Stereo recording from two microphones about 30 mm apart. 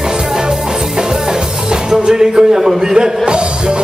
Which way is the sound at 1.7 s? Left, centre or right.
Right.